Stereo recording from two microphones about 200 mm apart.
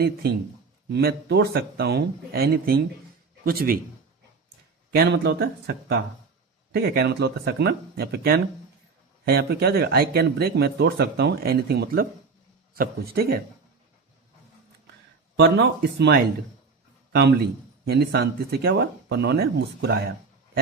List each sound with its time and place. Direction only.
0.2 s speech: 50° right (ahead or behind)
4.9 s speech: 55° right (ahead or behind)
15.4 s a man's voice: 60° right (ahead or behind)